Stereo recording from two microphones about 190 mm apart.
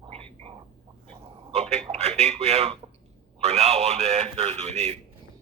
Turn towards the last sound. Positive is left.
turn(degrees=-30)  # may be behind; listen again after turning